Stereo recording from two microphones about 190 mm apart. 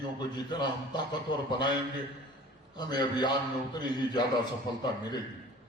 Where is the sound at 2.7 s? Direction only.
25° left (ahead or behind).